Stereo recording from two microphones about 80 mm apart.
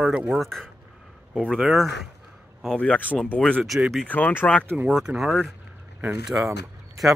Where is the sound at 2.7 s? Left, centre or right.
Centre.